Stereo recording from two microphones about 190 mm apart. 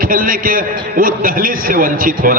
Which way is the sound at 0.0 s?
50° right (ahead or behind).